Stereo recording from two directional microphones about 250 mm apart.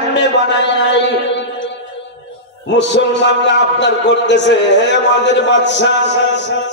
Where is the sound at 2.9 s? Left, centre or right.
Left.